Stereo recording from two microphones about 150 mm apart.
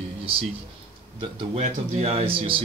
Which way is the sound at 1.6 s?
45° right (ahead or behind).